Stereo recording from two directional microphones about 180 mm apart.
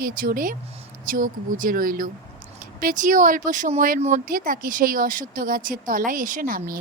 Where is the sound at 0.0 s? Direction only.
55° right (ahead or behind).